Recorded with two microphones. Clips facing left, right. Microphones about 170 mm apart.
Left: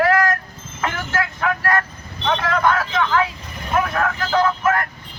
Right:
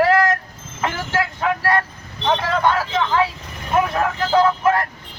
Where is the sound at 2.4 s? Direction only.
30° right (ahead or behind).